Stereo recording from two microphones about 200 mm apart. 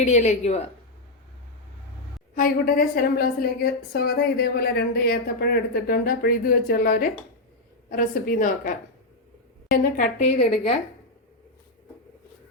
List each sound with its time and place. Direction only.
0.0 s a woman's voice: 35° left (ahead or behind)
2.3 s a woman's voice: 45° left (ahead or behind)
9.7 s a woman's voice: 40° left (ahead or behind)